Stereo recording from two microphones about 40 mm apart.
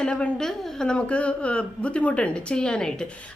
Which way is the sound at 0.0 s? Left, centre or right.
Left.